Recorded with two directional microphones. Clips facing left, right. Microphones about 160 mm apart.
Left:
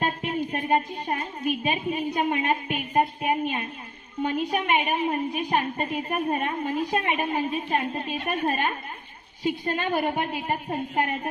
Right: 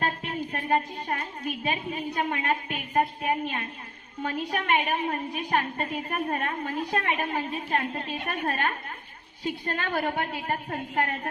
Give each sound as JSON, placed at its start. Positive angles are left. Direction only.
{"t": 0.5, "sound": "a woman's voice", "side_deg": 15}